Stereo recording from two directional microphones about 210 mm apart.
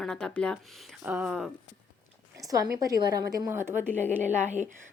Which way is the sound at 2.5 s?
15° right (ahead or behind).